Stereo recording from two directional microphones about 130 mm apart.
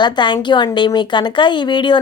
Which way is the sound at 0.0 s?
35° left (ahead or behind).